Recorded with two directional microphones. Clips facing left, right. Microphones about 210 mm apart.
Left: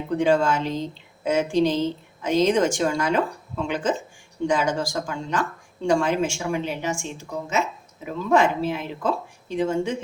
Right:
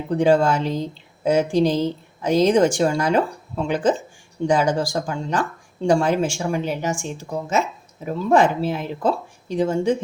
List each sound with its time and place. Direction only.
0.1 s a woman's voice: 35° right (ahead or behind)
8.0 s a woman's voice: 35° right (ahead or behind)